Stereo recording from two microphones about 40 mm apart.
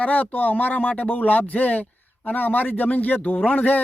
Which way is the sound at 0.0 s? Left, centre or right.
Left.